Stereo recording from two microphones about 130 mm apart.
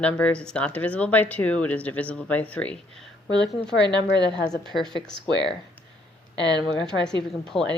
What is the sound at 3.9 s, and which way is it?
Speech, 35° right (ahead or behind).